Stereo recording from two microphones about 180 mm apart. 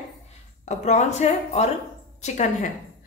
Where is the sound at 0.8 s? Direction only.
40° left (ahead or behind).